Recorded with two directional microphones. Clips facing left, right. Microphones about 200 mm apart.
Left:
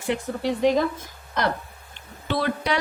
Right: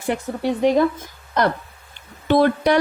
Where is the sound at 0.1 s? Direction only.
55° right (ahead or behind).